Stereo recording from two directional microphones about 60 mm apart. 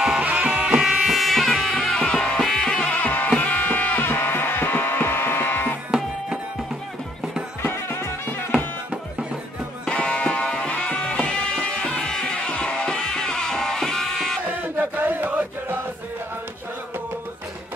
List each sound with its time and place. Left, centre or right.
0.2 s music: right
0.8 s music: centre
2.9 s music: left
5.9 s music: centre
7.6 s music: left
9.8 s music: centre
14.6 s chant: right